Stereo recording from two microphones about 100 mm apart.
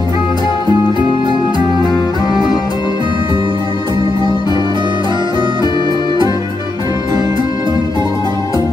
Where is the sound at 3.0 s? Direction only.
55° right (ahead or behind).